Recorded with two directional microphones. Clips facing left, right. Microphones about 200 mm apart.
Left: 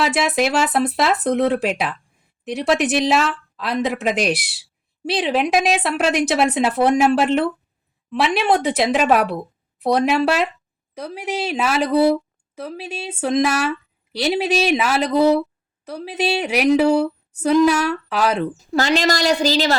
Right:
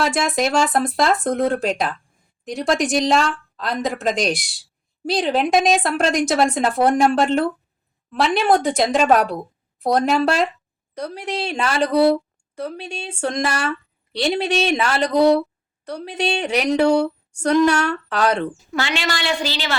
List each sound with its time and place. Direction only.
0.0 s a woman's voice: 5° left (ahead or behind)
18.5 s speech: 40° left (ahead or behind)